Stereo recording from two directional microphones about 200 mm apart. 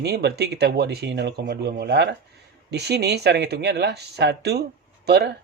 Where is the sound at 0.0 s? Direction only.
55° right (ahead or behind).